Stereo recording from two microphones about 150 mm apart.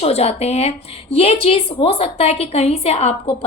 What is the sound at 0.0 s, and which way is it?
A woman's voice, 45° left (ahead or behind).